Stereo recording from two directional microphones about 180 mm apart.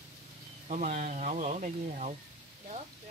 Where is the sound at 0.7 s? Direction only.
40° right (ahead or behind).